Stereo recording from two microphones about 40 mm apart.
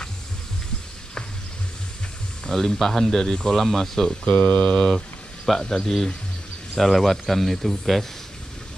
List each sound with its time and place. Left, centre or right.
2.5 s speech: centre
4.3 s mantra: left
4.7 s a man's voice: centre